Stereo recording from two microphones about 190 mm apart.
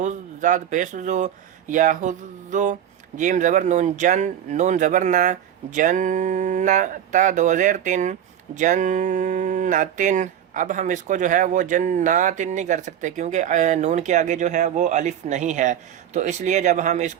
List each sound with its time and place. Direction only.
0.0 s speech: 40° right (ahead or behind)